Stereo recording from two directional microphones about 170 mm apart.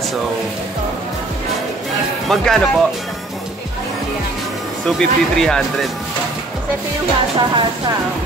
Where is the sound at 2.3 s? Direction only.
Centre (ahead or behind).